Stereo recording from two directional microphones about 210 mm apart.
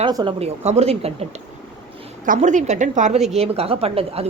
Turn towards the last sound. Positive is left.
turn(degrees=-25)  # may be behind; listen again after turning